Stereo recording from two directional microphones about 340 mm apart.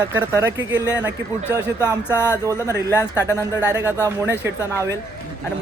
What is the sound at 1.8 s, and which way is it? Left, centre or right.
Speech, centre.